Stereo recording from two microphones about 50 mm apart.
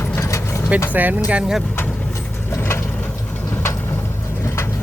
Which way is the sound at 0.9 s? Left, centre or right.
Right.